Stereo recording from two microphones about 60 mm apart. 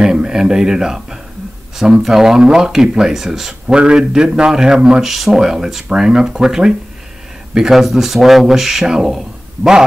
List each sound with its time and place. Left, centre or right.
0.0 s speech: centre
2.0 s speech: centre